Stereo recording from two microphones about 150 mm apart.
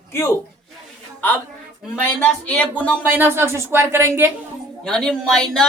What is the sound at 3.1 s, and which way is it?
Speech, 15° right (ahead or behind).